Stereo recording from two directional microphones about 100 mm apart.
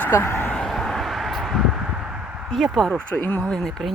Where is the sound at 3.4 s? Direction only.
5° left (ahead or behind).